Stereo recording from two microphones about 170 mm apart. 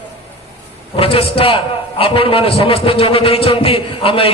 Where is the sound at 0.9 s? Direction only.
35° left (ahead or behind).